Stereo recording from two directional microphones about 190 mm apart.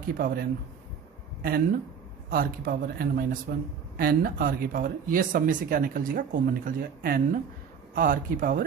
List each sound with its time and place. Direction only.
0.1 s speech: 50° right (ahead or behind)